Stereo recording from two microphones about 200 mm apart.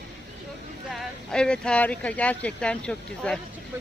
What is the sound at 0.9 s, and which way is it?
Speech, 5° left (ahead or behind).